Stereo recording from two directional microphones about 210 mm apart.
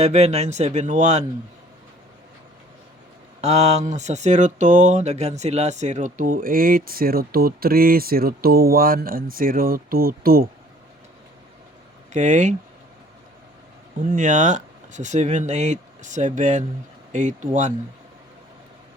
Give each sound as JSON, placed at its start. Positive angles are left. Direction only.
{"t": 0.0, "sound": "speech", "side_deg": -30}
{"t": 3.4, "sound": "speech", "side_deg": -30}
{"t": 12.1, "sound": "speech", "side_deg": -35}
{"t": 14.1, "sound": "speech", "side_deg": -35}